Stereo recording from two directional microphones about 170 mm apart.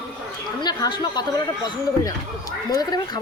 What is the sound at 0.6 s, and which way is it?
Speech, 25° left (ahead or behind).